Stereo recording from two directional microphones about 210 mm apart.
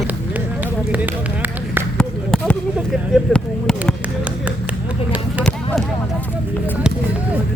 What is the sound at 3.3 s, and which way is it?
Speech, centre (ahead or behind).